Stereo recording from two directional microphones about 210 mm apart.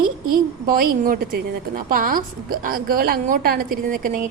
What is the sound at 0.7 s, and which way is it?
A woman's voice, 45° right (ahead or behind).